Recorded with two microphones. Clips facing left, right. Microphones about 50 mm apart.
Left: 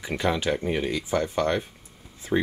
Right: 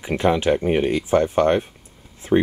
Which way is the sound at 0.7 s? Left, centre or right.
Right.